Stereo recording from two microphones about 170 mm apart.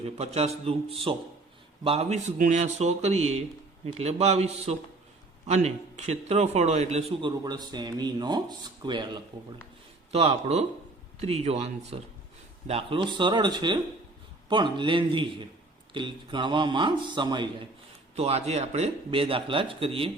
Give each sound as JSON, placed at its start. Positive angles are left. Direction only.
{"t": 0.0, "sound": "speech", "side_deg": -40}
{"t": 7.3, "sound": "speech", "side_deg": -25}
{"t": 10.1, "sound": "speech", "side_deg": -35}
{"t": 18.2, "sound": "speech", "side_deg": -40}